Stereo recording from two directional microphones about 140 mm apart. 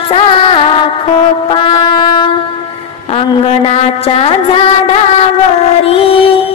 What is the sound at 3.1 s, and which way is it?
Music, 45° left (ahead or behind).